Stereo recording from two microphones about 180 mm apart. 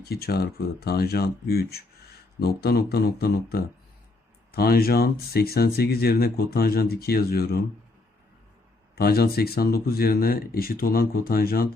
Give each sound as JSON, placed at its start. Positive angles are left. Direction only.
{"t": 0.0, "sound": "speech", "side_deg": 60}
{"t": 9.0, "sound": "speech", "side_deg": 60}